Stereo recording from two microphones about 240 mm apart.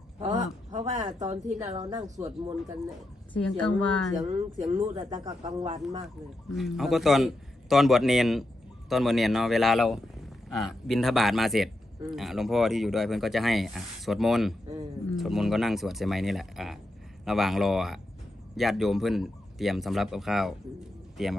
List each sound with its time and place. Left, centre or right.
0.2 s a sound: right
1.6 s speech: centre
3.3 s speech: centre
4.3 s speech: right
6.5 s speech: centre